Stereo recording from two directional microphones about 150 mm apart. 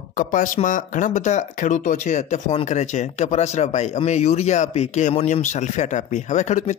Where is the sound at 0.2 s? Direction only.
60° left (ahead or behind).